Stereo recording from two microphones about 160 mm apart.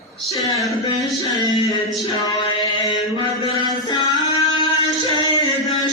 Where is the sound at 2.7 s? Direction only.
30° left (ahead or behind).